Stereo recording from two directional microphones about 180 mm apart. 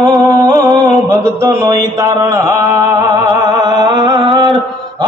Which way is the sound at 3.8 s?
25° right (ahead or behind).